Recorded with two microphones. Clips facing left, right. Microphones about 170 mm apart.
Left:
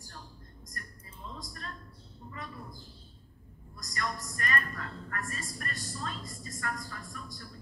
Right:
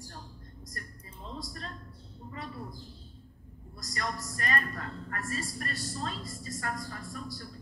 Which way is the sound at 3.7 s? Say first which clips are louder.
Right 1 dB; 35° right (ahead or behind).